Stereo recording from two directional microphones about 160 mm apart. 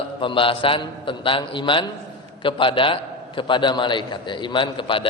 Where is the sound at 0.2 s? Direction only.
30° left (ahead or behind).